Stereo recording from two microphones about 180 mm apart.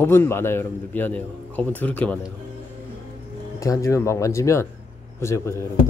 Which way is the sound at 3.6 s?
20° left (ahead or behind).